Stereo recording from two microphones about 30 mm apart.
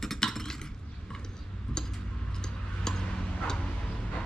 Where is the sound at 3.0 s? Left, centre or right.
Left.